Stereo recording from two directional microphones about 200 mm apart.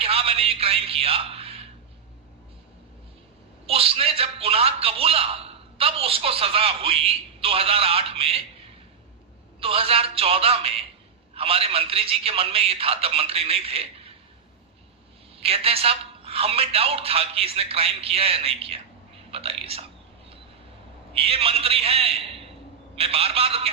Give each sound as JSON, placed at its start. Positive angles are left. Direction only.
{"t": 0.0, "sound": "a man's voice", "side_deg": -30}
{"t": 3.7, "sound": "a man's voice", "side_deg": -30}
{"t": 9.6, "sound": "a man's voice", "side_deg": -30}
{"t": 15.4, "sound": "a man's voice", "side_deg": -30}
{"t": 21.1, "sound": "a man's voice", "side_deg": -30}